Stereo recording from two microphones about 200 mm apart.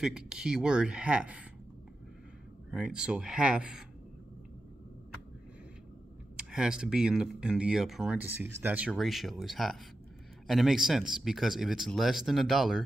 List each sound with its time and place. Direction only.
0.0 s speech: 5° right (ahead or behind)
2.7 s speech: 5° right (ahead or behind)
6.3 s speech: 5° right (ahead or behind)